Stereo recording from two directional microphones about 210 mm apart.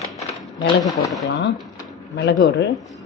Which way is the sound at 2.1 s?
55° left (ahead or behind).